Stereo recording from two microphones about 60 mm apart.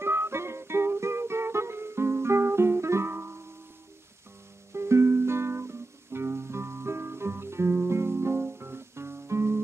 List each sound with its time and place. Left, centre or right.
0.0 s music: right
4.7 s music: right